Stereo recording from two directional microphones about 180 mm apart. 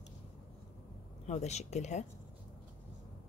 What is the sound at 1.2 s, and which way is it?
Speech, 40° left (ahead or behind).